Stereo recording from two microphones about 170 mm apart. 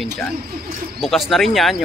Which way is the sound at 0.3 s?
65° right (ahead or behind).